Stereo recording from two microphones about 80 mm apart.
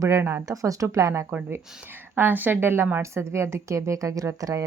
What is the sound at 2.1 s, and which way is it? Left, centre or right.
A woman's voice, right.